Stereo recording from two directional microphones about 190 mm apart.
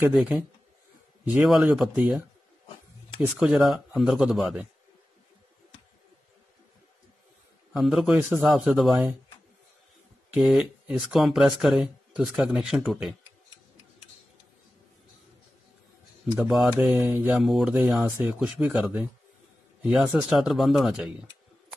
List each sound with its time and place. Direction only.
0.1 s speech: 5° right (ahead or behind)
3.2 s speech: centre (ahead or behind)
7.7 s speech: centre (ahead or behind)
10.3 s speech: 5° right (ahead or behind)
16.3 s a man's voice: centre (ahead or behind)